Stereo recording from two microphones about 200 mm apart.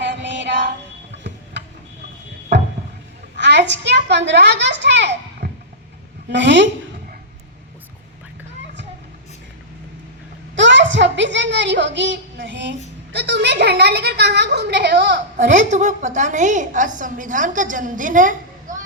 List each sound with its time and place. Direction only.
0.0 s music: 60° right (ahead or behind)
1.1 s a sound: 60° right (ahead or behind)
3.3 s a child's voice: 60° right (ahead or behind)
10.5 s a sound: 65° right (ahead or behind)
13.1 s a woman's voice: 55° right (ahead or behind)
15.5 s a woman's voice: 40° right (ahead or behind)